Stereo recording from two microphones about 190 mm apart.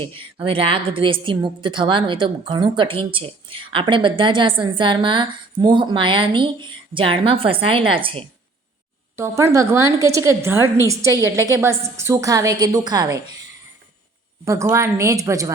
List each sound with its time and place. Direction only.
0.0 s a woman's voice: 25° right (ahead or behind)
9.1 s a woman's voice: 15° right (ahead or behind)
14.4 s a woman's voice: 15° right (ahead or behind)